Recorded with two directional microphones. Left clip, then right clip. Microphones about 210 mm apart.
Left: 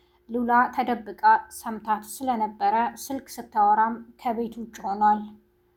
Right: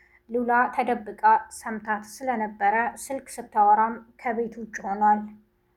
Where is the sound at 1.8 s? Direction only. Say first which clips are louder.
Left 3 dB; 45° left (ahead or behind).